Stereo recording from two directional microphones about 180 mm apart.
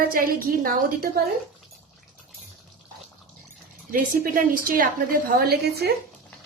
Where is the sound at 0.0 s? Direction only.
50° right (ahead or behind).